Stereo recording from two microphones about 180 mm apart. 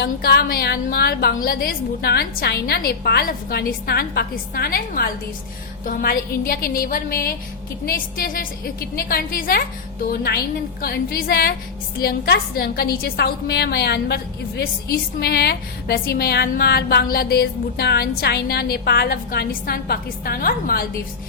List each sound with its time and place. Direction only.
0.0 s a woman's voice: 60° left (ahead or behind)
15.2 s a woman's voice: 65° left (ahead or behind)